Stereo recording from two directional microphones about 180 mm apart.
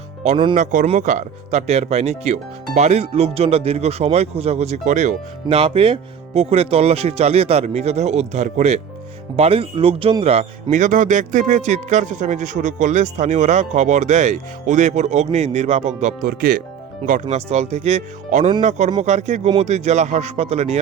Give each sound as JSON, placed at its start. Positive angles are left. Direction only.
{"t": 0.5, "sound": "speech", "side_deg": -45}